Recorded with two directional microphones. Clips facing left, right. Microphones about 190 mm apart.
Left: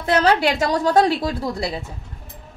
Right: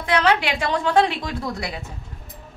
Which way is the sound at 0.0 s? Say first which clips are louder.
Left 3 dB; 40° left (ahead or behind).